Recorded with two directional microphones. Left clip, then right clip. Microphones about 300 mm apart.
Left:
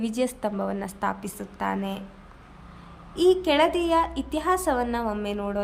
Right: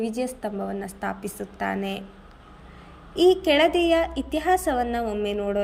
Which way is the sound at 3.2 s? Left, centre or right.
Centre.